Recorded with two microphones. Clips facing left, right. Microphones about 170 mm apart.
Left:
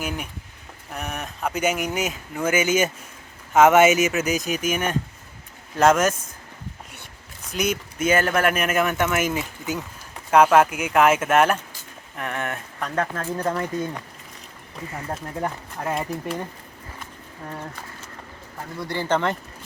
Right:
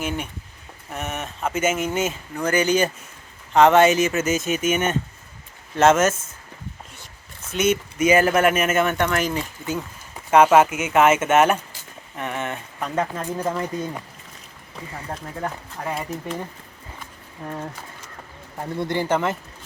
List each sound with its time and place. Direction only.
0.9 s speech: centre (ahead or behind)
7.5 s speech: 5° right (ahead or behind)
15.1 s speech: 5° left (ahead or behind)
18.8 s speech: 20° right (ahead or behind)
19.0 s speech: 5° right (ahead or behind)